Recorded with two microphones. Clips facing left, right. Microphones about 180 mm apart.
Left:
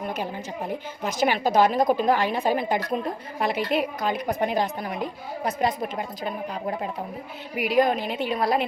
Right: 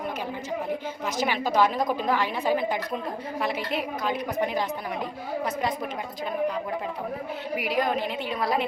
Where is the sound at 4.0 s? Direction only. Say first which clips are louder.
Left 2 dB; 45° left (ahead or behind).